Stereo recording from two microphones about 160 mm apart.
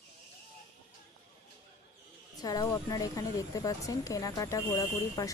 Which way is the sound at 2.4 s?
25° left (ahead or behind).